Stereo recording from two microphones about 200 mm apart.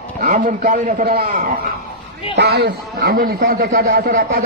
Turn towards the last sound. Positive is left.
turn(degrees=-50)  # may be behind; listen again after turning